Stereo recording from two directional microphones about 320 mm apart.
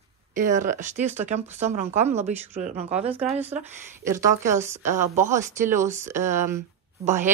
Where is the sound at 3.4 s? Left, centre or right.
Centre.